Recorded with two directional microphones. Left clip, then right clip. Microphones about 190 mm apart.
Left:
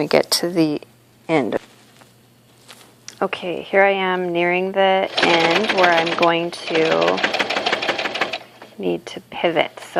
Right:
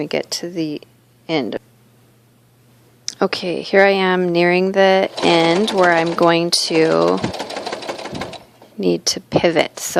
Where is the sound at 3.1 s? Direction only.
35° right (ahead or behind).